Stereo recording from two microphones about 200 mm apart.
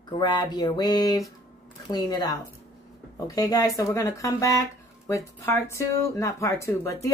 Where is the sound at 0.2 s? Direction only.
20° left (ahead or behind).